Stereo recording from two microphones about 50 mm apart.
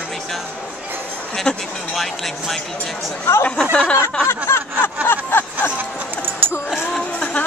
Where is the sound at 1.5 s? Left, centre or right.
Centre.